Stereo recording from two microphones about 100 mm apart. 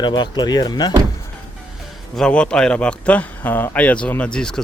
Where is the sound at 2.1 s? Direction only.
10° left (ahead or behind).